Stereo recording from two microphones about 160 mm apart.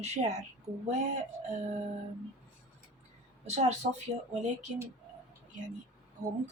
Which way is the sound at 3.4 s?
45° right (ahead or behind).